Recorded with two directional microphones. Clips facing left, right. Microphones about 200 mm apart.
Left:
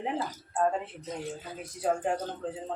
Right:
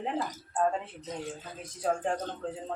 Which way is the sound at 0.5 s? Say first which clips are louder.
Left 1 dB; 5° left (ahead or behind).